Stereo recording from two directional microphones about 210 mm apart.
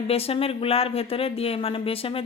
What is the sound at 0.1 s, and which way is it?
Speech, 30° left (ahead or behind).